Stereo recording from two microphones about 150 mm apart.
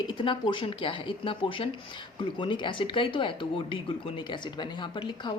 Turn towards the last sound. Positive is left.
turn(degrees=30)  # may be behind; listen again after turning